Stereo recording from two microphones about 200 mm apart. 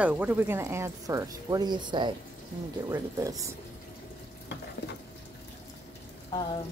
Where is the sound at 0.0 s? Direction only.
5° right (ahead or behind).